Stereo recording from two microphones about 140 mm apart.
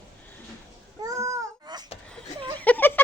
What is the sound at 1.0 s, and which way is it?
Babbling, 25° right (ahead or behind).